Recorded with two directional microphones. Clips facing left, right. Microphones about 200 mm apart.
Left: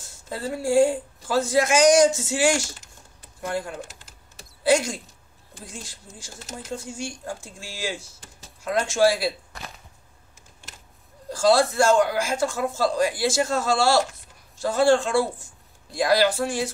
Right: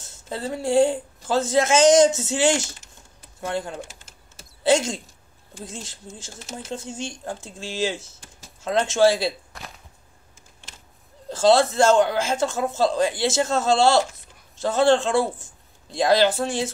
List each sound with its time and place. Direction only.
0.3 s a man's voice: 25° right (ahead or behind)
4.6 s a man's voice: 25° right (ahead or behind)
9.5 s whip: centre (ahead or behind)
11.2 s a man's voice: 25° right (ahead or behind)